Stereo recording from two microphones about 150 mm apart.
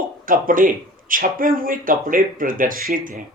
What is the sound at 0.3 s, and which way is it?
Speech, 65° right (ahead or behind).